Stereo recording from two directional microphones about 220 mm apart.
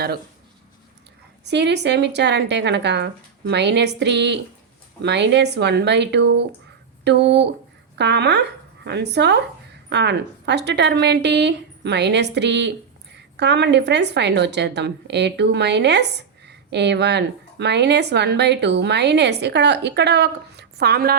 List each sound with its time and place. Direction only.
1.5 s a woman's voice: 50° right (ahead or behind)